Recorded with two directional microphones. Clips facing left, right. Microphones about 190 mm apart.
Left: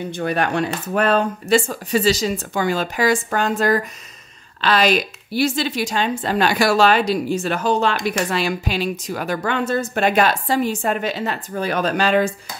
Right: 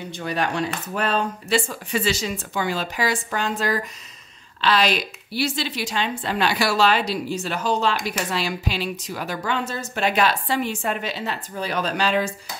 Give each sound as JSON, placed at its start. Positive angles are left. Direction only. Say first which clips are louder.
{"t": 0.1, "sound": "a woman's voice", "louder": "left 4 dB", "side_deg": 55}